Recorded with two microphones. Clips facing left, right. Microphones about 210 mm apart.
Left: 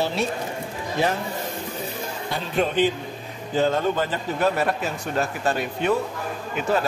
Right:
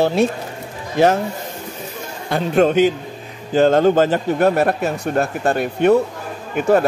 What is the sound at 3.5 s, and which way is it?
Speech, 80° right.